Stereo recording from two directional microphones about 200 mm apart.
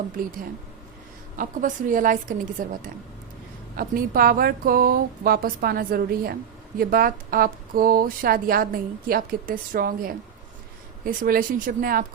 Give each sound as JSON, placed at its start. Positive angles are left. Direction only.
{"t": 1.4, "sound": "a woman's voice", "side_deg": -40}
{"t": 3.8, "sound": "a woman's voice", "side_deg": -45}